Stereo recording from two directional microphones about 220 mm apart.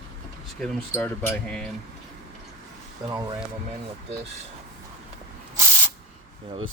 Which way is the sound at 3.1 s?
20° right (ahead or behind).